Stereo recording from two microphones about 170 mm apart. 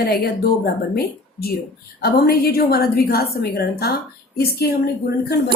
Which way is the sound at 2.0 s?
65° left (ahead or behind).